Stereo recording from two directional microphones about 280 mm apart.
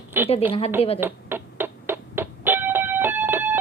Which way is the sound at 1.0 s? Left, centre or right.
Centre.